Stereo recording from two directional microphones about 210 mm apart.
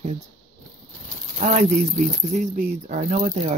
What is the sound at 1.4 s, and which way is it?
Speech, 35° right (ahead or behind).